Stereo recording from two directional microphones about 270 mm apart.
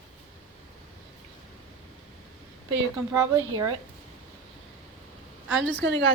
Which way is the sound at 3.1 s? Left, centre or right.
Centre.